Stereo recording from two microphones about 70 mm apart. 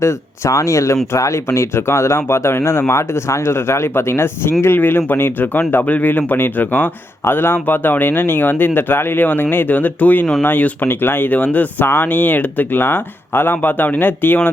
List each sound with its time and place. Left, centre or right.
0.0 s speech: left